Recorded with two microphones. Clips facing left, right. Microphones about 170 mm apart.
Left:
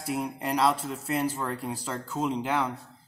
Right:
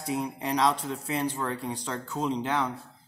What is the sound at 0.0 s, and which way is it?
Speech, 5° left (ahead or behind).